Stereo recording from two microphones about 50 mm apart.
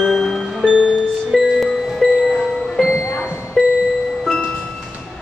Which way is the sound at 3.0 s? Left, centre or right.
Left.